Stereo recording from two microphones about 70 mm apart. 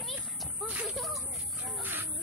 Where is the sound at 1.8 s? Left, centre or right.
Right.